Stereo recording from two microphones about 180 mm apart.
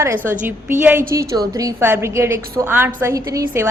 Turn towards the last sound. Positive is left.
turn(degrees=-20)  # may be behind; listen again after turning